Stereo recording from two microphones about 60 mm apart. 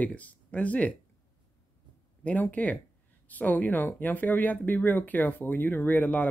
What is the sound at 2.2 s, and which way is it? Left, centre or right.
Speech, left.